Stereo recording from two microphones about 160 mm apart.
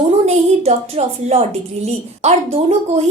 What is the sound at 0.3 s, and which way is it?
A woman's voice, 40° right (ahead or behind).